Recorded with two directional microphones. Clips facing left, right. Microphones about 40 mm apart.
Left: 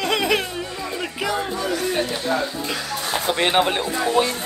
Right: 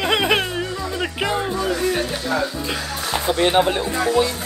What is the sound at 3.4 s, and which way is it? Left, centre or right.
Speech, left.